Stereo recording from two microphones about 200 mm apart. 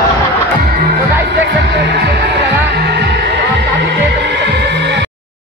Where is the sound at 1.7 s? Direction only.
55° right (ahead or behind).